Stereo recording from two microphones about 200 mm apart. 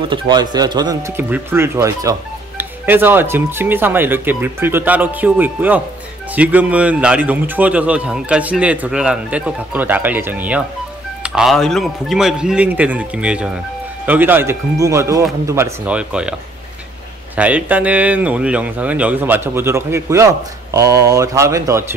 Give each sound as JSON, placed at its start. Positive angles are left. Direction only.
{"t": 0.1, "sound": "speech", "side_deg": -20}
{"t": 17.4, "sound": "speech", "side_deg": -5}